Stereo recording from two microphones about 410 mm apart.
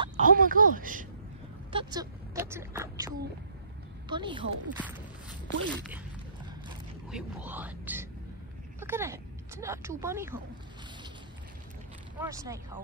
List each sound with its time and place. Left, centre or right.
0.0 s speech: centre
6.4 s a sound: centre
8.7 s speech: centre
12.2 s speech: centre